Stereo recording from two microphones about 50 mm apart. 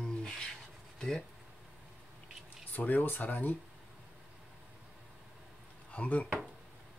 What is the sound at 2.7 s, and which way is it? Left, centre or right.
Speech, left.